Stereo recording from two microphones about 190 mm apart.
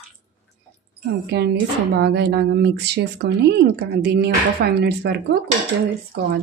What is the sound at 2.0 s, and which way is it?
Speech, 60° right (ahead or behind).